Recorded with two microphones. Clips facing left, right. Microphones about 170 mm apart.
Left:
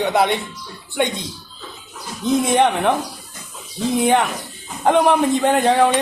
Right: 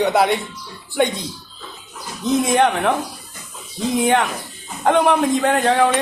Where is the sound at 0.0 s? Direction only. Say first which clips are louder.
Right 1 dB; centre (ahead or behind).